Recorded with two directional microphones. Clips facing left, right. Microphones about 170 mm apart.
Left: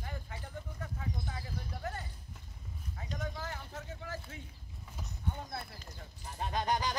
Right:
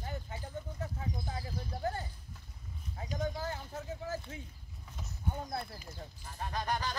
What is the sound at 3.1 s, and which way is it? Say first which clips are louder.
Speech: right 5 dB; 30° right (ahead or behind).